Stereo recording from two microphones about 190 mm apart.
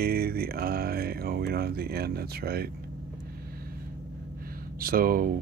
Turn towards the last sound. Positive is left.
turn(degrees=-50)  # may be behind; listen again after turning